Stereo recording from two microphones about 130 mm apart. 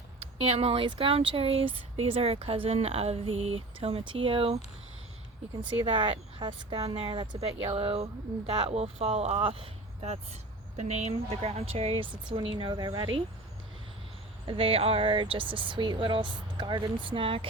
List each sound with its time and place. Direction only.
0.2 s speech: 50° right (ahead or behind)
5.7 s speech: 45° right (ahead or behind)
10.8 s speech: 60° right (ahead or behind); by 13.2 s 35° right (ahead or behind)
14.4 s speech: 45° right (ahead or behind)